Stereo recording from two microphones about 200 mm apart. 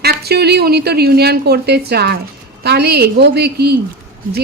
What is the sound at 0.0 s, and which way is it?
A woman's voice, 55° right (ahead or behind).